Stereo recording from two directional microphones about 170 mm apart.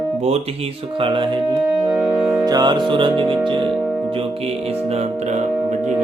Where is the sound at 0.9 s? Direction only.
30° right (ahead or behind).